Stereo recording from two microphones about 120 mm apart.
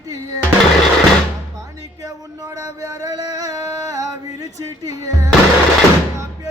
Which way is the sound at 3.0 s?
30° right (ahead or behind).